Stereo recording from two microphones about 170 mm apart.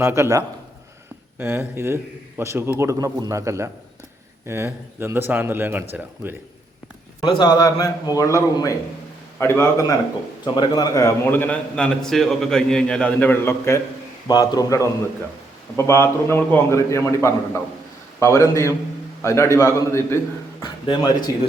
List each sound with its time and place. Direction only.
0.0 s speech: 15° right (ahead or behind)
7.2 s a man's voice: 25° left (ahead or behind)
10.4 s a man's voice: 25° left (ahead or behind)